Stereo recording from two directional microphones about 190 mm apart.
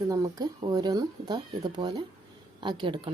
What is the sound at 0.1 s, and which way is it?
Speech, 20° right (ahead or behind).